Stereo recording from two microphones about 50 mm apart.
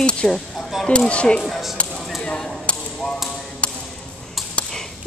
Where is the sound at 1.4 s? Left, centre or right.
Centre.